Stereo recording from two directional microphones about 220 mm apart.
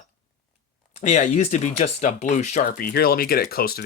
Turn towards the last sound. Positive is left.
turn(degrees=45)  # may be behind; listen again after turning